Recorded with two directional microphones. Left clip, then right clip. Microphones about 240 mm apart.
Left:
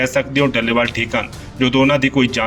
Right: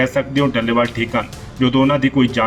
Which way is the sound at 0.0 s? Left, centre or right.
Left.